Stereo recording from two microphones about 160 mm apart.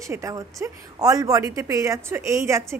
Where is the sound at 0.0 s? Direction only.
20° right (ahead or behind).